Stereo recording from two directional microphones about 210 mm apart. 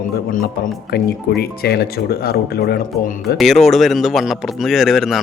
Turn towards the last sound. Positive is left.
turn(degrees=0)  # may be behind; listen again after turning